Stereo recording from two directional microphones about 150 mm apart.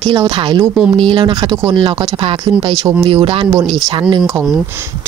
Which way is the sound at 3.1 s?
35° right (ahead or behind).